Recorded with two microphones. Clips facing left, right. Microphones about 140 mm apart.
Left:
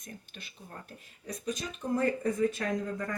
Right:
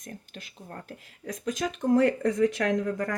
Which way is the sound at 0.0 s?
80° right.